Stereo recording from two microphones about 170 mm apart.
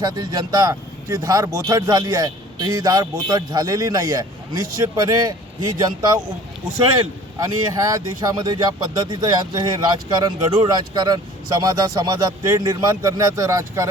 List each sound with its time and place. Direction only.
0.0 s speech: 25° right (ahead or behind)
7.3 s speech: 20° right (ahead or behind)